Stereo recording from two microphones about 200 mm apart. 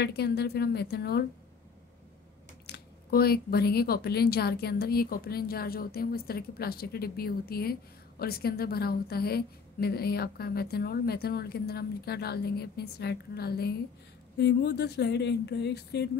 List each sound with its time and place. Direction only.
0.0 s a woman's voice: 55° left (ahead or behind)
2.6 s a woman's voice: 55° left (ahead or behind)